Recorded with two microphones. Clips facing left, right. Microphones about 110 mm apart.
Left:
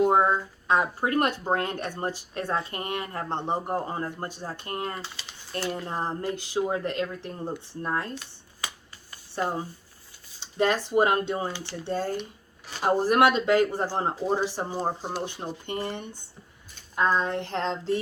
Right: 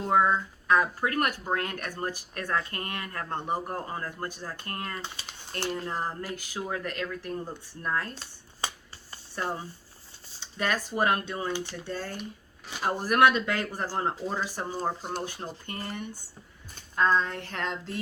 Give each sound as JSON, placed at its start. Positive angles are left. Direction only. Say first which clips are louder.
{"t": 0.0, "sound": "speech", "louder": "left 3 dB", "side_deg": 25}
{"t": 8.6, "sound": "finger snapping", "louder": "right 2 dB", "side_deg": -30}
{"t": 9.3, "sound": "speech", "louder": "left 4 dB", "side_deg": 30}